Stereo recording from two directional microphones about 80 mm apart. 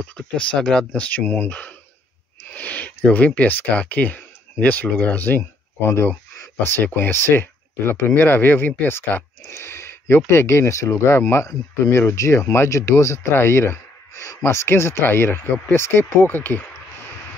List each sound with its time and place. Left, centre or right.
0.0 s speech: centre